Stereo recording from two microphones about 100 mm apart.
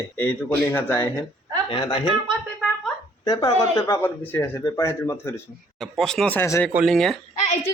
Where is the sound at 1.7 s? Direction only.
55° left (ahead or behind).